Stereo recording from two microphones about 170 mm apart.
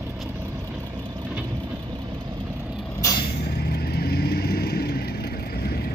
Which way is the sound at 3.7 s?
65° left (ahead or behind).